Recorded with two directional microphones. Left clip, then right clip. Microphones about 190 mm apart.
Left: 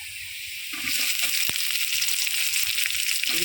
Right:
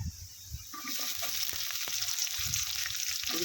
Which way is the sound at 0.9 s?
10° right (ahead or behind).